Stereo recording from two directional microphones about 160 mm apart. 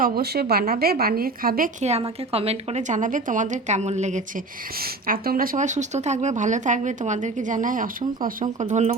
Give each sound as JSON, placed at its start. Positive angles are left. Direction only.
{"t": 0.0, "sound": "a woman's voice", "side_deg": -80}
{"t": 1.8, "sound": "speech", "side_deg": -40}
{"t": 4.8, "sound": "speech", "side_deg": -65}